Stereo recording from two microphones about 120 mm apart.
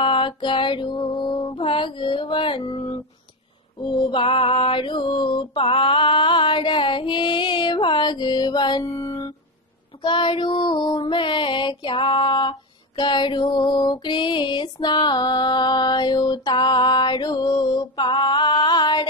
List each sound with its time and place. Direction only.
0.0 s music: 45° left (ahead or behind)
3.8 s female singing: 40° left (ahead or behind)
8.8 s music: 25° left (ahead or behind)
10.0 s female singing: 45° left (ahead or behind)